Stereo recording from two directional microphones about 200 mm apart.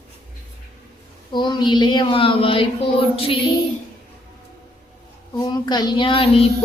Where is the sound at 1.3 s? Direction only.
20° left (ahead or behind).